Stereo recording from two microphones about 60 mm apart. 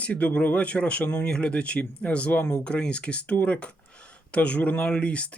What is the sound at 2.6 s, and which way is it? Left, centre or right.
Speech, centre.